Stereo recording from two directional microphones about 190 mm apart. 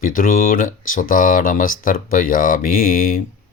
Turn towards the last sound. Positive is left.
turn(degrees=50)  # may be behind; listen again after turning